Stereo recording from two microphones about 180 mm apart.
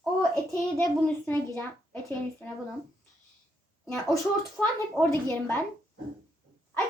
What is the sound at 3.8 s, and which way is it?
A woman's voice, centre (ahead or behind).